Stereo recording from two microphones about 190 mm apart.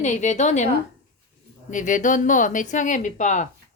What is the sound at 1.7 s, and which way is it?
Speech, 40° left (ahead or behind).